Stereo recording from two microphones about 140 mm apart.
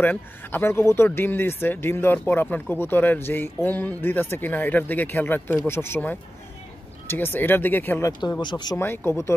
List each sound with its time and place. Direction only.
0.0 s speech: 15° left (ahead or behind)
8.2 s speech: 30° left (ahead or behind)
8.7 s speech: 15° left (ahead or behind)